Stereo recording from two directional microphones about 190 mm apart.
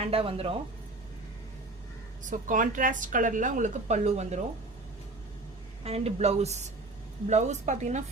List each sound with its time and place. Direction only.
0.0 s speech: 30° right (ahead or behind)
2.2 s speech: 40° right (ahead or behind)
5.8 s a woman's voice: 30° right (ahead or behind)